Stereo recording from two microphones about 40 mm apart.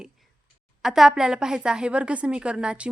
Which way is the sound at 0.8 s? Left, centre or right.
Centre.